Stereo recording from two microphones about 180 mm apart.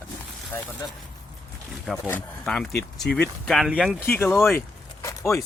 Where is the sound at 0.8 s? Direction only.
20° left (ahead or behind).